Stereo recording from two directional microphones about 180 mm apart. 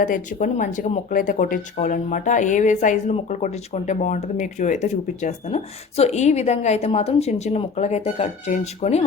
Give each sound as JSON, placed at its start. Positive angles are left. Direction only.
{"t": 0.0, "sound": "a woman's voice", "side_deg": 45}